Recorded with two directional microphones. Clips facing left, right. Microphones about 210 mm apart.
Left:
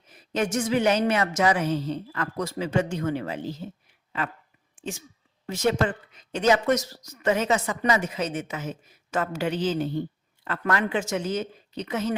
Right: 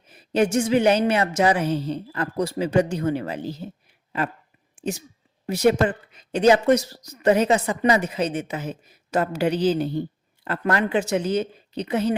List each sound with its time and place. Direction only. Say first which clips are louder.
0.1 s speech: right 6 dB; 30° right (ahead or behind)
5.6 s speech: right 5 dB; 15° right (ahead or behind)
6.4 s speech: right 5 dB; 30° right (ahead or behind)